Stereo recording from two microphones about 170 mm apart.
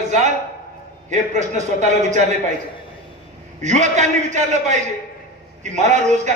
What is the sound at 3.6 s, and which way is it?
A man's voice, 45° right (ahead or behind).